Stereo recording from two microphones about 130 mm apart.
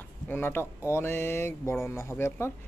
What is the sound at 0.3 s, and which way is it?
Speech, 15° left (ahead or behind).